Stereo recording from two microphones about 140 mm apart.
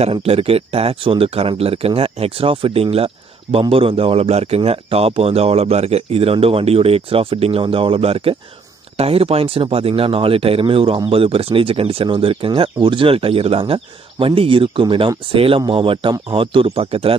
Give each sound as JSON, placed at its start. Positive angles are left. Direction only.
{"t": 0.0, "sound": "a man's voice", "side_deg": -45}